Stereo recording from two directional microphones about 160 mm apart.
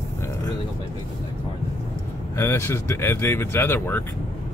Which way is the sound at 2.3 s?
15° left (ahead or behind).